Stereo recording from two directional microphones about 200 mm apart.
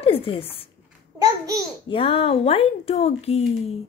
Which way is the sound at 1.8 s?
25° left (ahead or behind).